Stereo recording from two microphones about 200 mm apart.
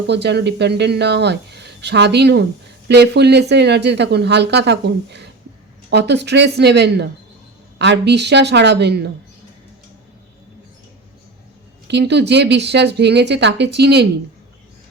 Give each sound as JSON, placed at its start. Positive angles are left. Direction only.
{"t": 0.1, "sound": "speech", "side_deg": -60}
{"t": 11.9, "sound": "speech", "side_deg": -60}